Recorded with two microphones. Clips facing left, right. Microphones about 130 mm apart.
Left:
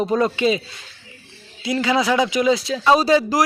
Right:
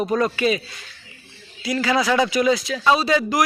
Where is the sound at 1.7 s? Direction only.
20° left (ahead or behind).